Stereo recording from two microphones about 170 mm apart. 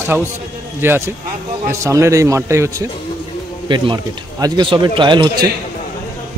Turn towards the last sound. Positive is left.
turn(degrees=-25)  # may be behind; listen again after turning